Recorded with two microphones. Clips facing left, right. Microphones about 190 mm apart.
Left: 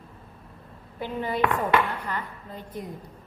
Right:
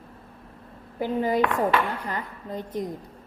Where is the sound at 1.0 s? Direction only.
40° right (ahead or behind).